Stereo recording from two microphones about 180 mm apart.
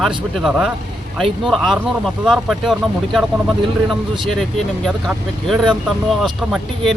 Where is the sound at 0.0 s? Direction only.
Centre (ahead or behind).